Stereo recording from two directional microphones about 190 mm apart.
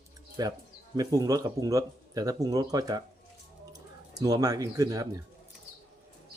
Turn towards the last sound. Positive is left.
turn(degrees=-20)  # may be behind; listen again after turning